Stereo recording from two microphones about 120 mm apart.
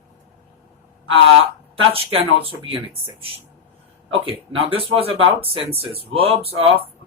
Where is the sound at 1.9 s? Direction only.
50° right (ahead or behind).